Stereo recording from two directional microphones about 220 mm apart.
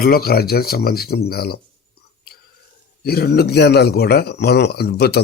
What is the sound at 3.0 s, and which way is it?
A man's voice, 45° left (ahead or behind).